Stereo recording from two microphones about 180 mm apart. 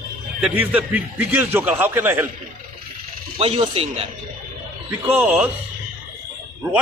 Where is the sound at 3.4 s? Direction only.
30° right (ahead or behind).